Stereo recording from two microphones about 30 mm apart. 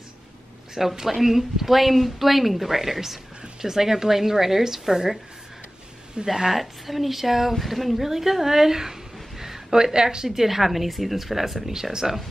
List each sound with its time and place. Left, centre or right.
0.8 s a woman's voice: centre
6.2 s a woman's voice: right
6.5 s speech: centre
9.4 s a sound: centre
9.9 s speech: right